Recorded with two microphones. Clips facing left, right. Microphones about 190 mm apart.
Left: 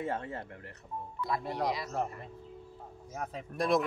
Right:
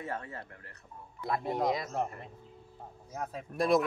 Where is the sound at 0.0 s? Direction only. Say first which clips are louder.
Left 4 dB; 25° left (ahead or behind).